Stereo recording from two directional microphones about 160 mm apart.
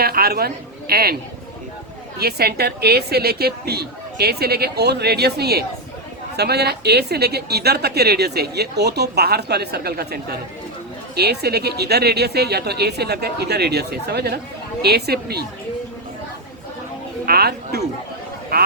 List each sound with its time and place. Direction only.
0.0 s a woman's voice: 75° right (ahead or behind)
2.1 s a woman's voice: 75° right (ahead or behind)
17.2 s speech: 75° right (ahead or behind)